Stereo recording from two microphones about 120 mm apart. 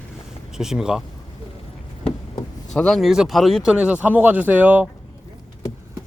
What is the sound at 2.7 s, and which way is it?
Speech, 5° left (ahead or behind).